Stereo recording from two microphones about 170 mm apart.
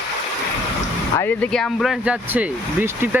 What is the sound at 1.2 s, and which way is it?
Speech, 5° left (ahead or behind).